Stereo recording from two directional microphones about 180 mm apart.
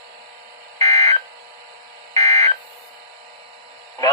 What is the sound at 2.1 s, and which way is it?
Buzzer, 20° left (ahead or behind).